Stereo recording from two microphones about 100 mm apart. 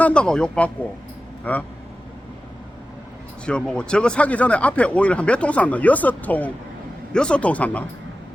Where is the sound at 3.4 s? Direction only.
10° left (ahead or behind).